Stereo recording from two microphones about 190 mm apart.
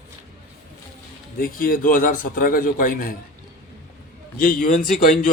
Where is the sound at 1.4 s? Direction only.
50° left (ahead or behind).